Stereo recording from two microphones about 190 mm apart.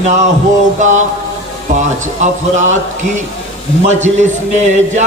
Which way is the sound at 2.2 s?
40° right (ahead or behind).